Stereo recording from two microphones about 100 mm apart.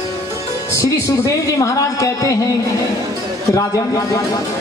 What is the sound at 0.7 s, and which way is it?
Speech, 30° left (ahead or behind).